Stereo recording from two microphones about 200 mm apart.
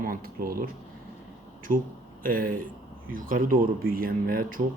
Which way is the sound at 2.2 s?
45° right (ahead or behind).